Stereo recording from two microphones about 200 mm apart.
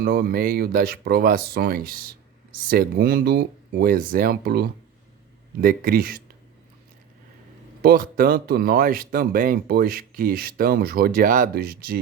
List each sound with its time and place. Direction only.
0.0 s speech: 50° right (ahead or behind)
7.8 s speech: 45° right (ahead or behind)